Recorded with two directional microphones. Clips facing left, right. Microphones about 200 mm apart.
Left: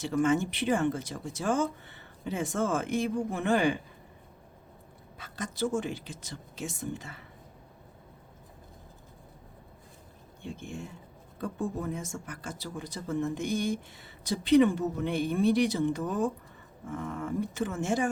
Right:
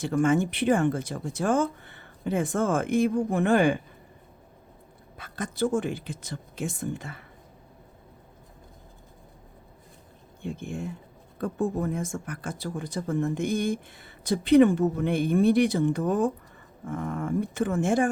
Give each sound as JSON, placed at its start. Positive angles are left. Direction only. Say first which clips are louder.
{"t": 0.0, "sound": "speech", "louder": "right 3 dB", "side_deg": -55}
{"t": 5.1, "sound": "speech", "louder": "right 4 dB", "side_deg": -55}
{"t": 10.4, "sound": "speech", "louder": "right 6 dB", "side_deg": -55}